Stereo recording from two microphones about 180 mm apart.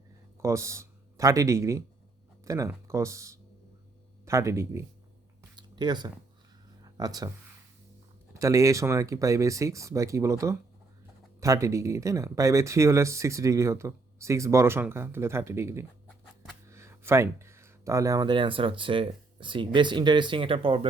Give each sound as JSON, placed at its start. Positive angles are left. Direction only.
{"t": 0.4, "sound": "speech", "side_deg": -15}
{"t": 5.4, "sound": "a sound", "side_deg": -25}
{"t": 6.8, "sound": "speech", "side_deg": -20}